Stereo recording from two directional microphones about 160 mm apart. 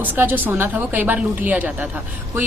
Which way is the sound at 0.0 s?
10° right (ahead or behind).